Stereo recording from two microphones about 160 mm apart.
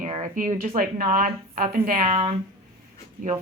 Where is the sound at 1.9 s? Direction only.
50° right (ahead or behind).